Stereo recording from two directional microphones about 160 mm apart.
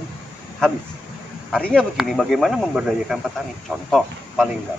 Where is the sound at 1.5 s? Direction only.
5° left (ahead or behind).